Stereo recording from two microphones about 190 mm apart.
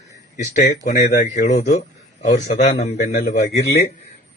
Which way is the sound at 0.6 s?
50° left (ahead or behind).